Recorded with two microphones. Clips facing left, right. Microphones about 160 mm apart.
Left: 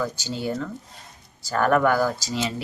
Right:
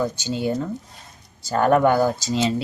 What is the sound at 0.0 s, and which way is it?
Speech, 20° right (ahead or behind).